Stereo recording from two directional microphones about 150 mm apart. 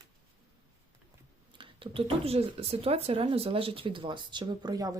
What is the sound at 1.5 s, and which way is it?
Speech, 35° right (ahead or behind).